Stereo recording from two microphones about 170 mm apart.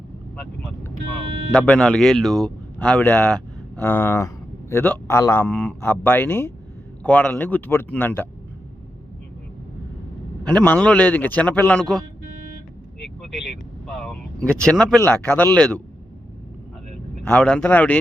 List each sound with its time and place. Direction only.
1.5 s a man's voice: 5° left (ahead or behind)
5.5 s a man's voice: 5° left (ahead or behind)
10.4 s a man's voice: 10° left (ahead or behind)
13.8 s speech: 5° left (ahead or behind)
17.2 s a man's voice: 5° left (ahead or behind)